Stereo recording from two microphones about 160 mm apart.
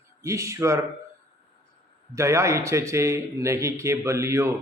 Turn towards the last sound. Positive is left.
turn(degrees=-15)  # may be behind; listen again after turning